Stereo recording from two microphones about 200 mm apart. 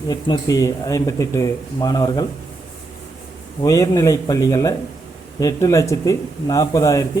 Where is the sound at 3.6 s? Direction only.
15° left (ahead or behind).